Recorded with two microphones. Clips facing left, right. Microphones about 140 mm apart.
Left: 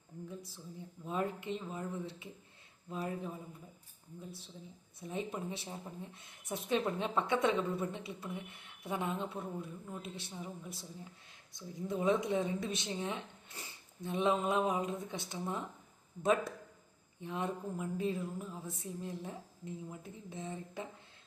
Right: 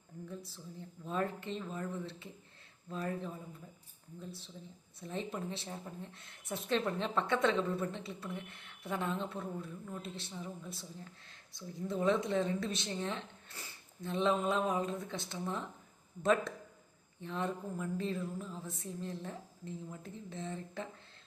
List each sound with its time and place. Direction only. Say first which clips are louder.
0.3 s speech: right 2 dB; 15° left (ahead or behind)
4.9 s speech: even; 15° left (ahead or behind)